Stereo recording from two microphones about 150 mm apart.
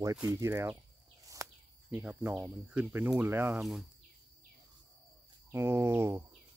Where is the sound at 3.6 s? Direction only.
Centre (ahead or behind).